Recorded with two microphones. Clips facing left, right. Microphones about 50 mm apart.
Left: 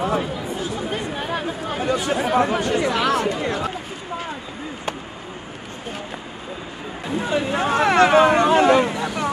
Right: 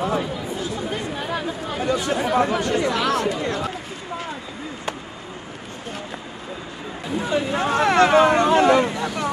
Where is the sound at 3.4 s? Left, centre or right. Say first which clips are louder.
Left 1 dB; centre.